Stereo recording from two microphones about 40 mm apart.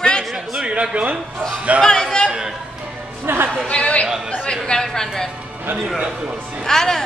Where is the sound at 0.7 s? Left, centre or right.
Right.